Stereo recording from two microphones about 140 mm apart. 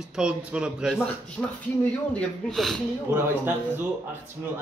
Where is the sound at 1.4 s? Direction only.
10° left (ahead or behind).